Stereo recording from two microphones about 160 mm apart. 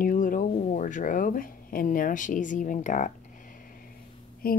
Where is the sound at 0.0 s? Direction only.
60° left (ahead or behind).